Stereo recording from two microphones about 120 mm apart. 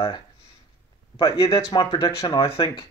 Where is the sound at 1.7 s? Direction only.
40° left (ahead or behind).